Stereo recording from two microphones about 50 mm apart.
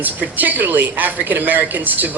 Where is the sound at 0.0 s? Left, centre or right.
Right.